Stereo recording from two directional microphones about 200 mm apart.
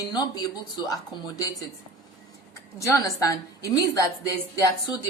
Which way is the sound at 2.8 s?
15° left (ahead or behind).